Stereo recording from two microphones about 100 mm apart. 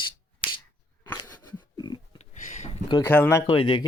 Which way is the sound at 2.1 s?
90° left.